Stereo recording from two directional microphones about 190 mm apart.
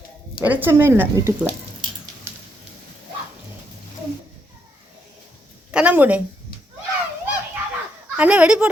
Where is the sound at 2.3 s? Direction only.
15° right (ahead or behind).